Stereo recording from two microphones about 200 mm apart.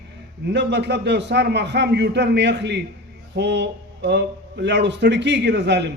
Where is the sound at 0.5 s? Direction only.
60° right (ahead or behind).